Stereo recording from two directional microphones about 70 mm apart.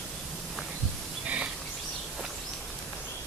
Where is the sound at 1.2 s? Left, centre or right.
Right.